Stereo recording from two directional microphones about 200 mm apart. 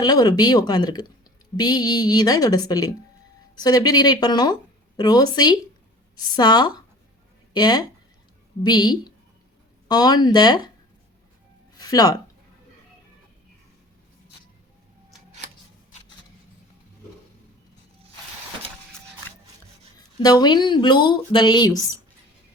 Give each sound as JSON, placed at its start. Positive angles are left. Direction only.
{"t": 0.0, "sound": "speech", "side_deg": 20}
{"t": 11.8, "sound": "speech", "side_deg": 20}
{"t": 20.1, "sound": "speech", "side_deg": 20}